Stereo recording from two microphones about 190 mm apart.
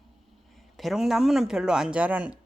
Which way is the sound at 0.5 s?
Centre (ahead or behind).